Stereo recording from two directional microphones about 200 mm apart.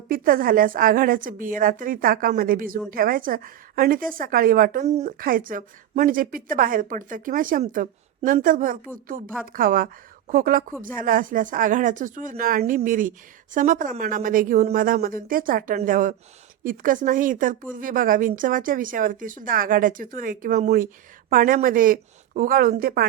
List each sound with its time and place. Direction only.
0.1 s a woman's voice: 45° right (ahead or behind)